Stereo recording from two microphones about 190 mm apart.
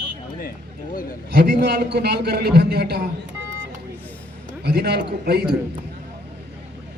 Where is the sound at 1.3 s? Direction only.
60° right (ahead or behind).